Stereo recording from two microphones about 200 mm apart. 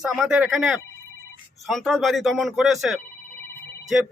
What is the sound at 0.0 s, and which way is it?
Speech, centre (ahead or behind).